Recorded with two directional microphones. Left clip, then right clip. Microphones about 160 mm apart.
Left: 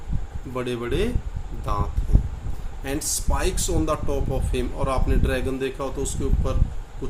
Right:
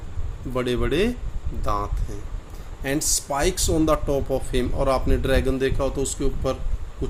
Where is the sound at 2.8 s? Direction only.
35° right (ahead or behind).